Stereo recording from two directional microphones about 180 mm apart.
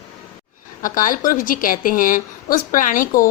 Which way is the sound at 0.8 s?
50° left (ahead or behind).